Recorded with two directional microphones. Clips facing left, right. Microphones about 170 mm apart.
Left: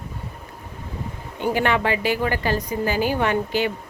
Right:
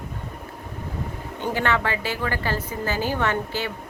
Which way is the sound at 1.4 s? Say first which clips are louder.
Left 3 dB; 15° left (ahead or behind).